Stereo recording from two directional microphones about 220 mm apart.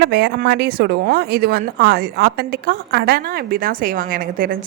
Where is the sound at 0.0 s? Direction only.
50° right (ahead or behind).